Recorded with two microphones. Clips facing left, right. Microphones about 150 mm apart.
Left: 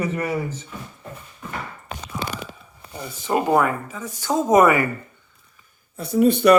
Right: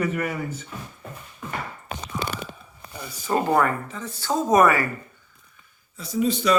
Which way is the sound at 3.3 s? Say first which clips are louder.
Left 2 dB; 10° left (ahead or behind).